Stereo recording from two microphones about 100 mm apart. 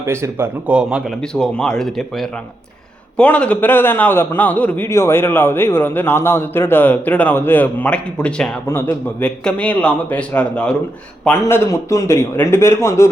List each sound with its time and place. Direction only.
0.0 s speech: 25° right (ahead or behind)
0.7 s speech: 10° right (ahead or behind)
1.3 s a man's voice: 5° left (ahead or behind)
4.9 s a man's voice: 25° left (ahead or behind); by 8.4 s 10° left (ahead or behind)
8.6 s a man's voice: 25° left (ahead or behind)
9.2 s a man's voice: 10° left (ahead or behind)
11.4 s a man's voice: 25° left (ahead or behind)